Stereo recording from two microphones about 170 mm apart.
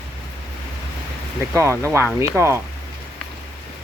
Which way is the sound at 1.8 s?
15° right (ahead or behind).